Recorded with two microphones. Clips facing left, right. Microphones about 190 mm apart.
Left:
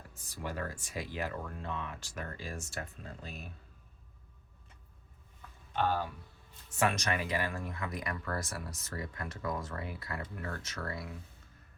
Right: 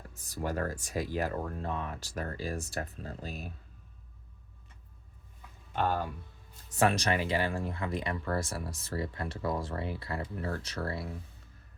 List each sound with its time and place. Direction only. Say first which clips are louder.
0.1 s speech: right 6 dB; 45° right (ahead or behind)
5.7 s speech: right 1 dB; 50° right (ahead or behind)
6.7 s speech: right 4 dB; 35° right (ahead or behind)